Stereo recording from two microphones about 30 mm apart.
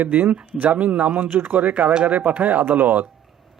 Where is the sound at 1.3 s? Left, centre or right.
Right.